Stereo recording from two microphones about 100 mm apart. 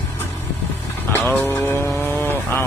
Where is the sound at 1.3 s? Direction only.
20° left (ahead or behind).